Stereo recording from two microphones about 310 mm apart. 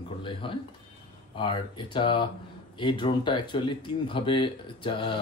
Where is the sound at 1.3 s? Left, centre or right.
Centre.